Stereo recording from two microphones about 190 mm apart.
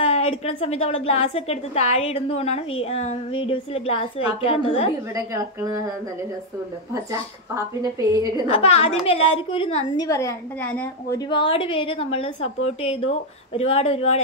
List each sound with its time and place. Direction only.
0.0 s a woman's voice: 35° left (ahead or behind)
5.1 s a woman's voice: 15° right (ahead or behind)
6.9 s a woman's voice: 15° right (ahead or behind)
8.5 s a woman's voice: 30° left (ahead or behind)
9.9 s a woman's voice: 15° left (ahead or behind)
11.2 s a woman's voice: 25° left (ahead or behind)